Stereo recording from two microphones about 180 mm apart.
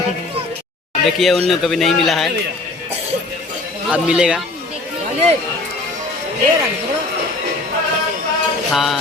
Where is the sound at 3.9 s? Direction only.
5° right (ahead or behind).